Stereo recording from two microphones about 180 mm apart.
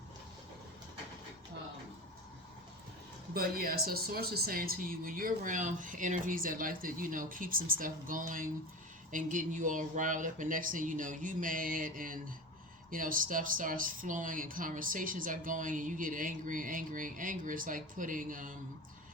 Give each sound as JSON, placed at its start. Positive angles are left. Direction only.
{"t": 3.3, "sound": "speech", "side_deg": -55}